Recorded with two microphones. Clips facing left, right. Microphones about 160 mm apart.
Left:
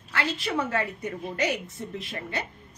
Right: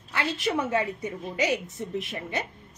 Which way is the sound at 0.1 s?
15° right (ahead or behind).